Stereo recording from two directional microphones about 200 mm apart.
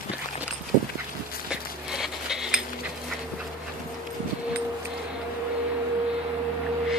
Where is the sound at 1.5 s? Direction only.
5° right (ahead or behind).